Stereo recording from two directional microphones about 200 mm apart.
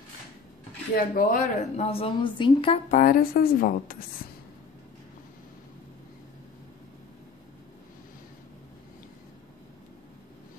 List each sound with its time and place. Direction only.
0.9 s a woman's voice: 45° left (ahead or behind)
1.9 s a woman's voice: 30° left (ahead or behind)
2.9 s a woman's voice: 45° left (ahead or behind)